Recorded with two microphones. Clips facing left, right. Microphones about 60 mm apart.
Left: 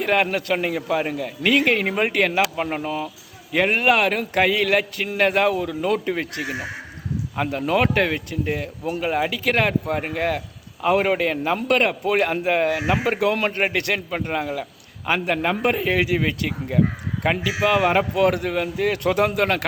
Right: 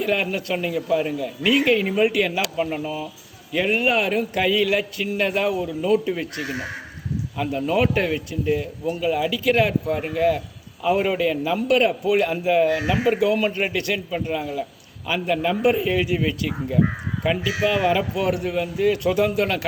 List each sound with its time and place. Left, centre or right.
0.0 s a man's voice: left
6.4 s speech: left
7.5 s a man's voice: left